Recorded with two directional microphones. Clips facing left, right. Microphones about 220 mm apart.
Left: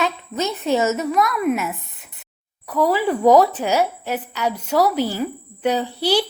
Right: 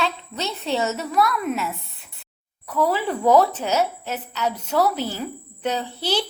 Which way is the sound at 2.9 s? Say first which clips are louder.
Left 4 dB; 10° left (ahead or behind).